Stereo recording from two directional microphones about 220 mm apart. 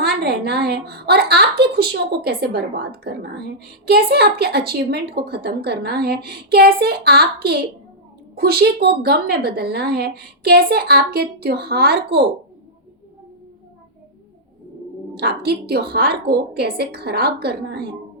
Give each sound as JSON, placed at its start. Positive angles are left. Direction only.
{"t": 0.0, "sound": "a woman's voice", "side_deg": -50}
{"t": 15.1, "sound": "a woman's voice", "side_deg": -45}